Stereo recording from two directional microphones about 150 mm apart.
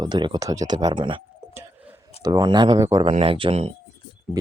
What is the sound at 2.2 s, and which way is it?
Speech, 25° right (ahead or behind).